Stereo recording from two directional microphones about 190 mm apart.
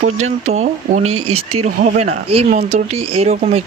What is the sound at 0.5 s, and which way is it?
Speech, 35° right (ahead or behind).